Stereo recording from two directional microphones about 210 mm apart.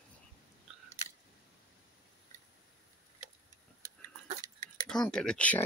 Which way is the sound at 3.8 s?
35° right (ahead or behind).